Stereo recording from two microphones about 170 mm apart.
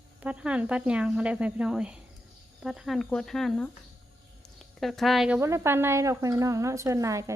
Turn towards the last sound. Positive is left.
turn(degrees=-20)  # may be behind; listen again after turning